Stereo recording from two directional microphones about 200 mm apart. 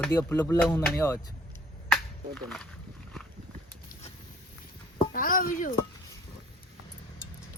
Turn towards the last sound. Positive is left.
turn(degrees=45)  # may be behind; listen again after turning